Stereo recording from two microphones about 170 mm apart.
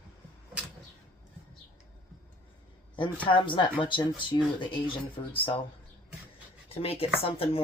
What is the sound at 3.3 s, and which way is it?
Speech, 30° left (ahead or behind).